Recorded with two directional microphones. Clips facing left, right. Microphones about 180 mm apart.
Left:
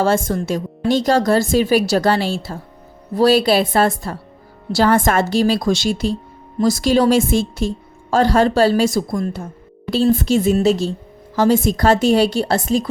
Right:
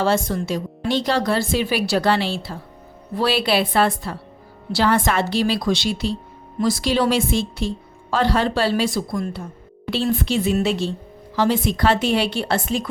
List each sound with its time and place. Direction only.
0.0 s a woman's voice: 45° left (ahead or behind)